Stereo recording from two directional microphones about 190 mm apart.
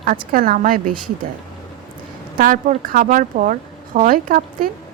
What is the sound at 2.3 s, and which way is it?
Speech, 45° right (ahead or behind).